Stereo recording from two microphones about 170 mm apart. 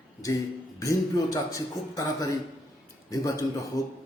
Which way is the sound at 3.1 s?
20° left (ahead or behind).